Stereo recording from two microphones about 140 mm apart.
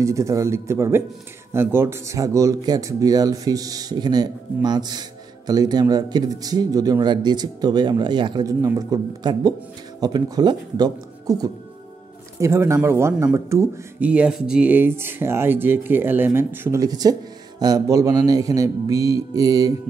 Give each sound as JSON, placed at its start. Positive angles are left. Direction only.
{"t": 0.0, "sound": "speech", "side_deg": -20}